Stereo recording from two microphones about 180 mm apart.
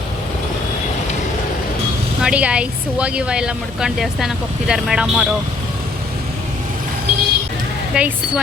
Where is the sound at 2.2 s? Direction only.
5° right (ahead or behind).